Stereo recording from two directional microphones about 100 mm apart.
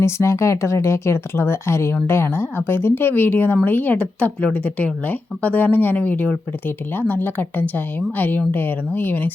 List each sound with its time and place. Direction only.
0.0 s speech: 30° left (ahead or behind)